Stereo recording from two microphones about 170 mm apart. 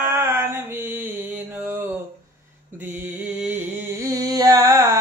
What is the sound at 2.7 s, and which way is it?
Music, 10° right (ahead or behind).